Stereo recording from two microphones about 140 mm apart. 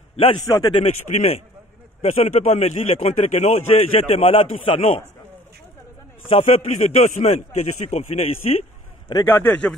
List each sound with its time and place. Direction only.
0.1 s a man's voice: 40° left (ahead or behind)
0.4 s a man's voice: 25° left (ahead or behind); by 5.0 s 45° left (ahead or behind)
6.3 s a man's voice: 50° left (ahead or behind)
9.2 s a man's voice: 15° left (ahead or behind)